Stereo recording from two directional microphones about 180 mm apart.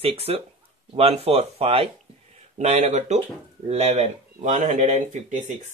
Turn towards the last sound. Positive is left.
turn(degrees=-45)  # may be behind; listen again after turning